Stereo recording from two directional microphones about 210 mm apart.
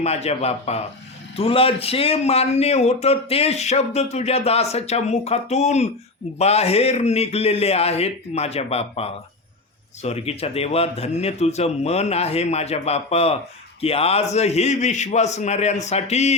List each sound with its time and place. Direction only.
0.0 s a man's voice: 30° left (ahead or behind)